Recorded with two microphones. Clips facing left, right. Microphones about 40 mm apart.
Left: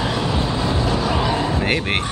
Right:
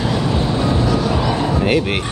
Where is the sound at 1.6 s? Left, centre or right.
Left.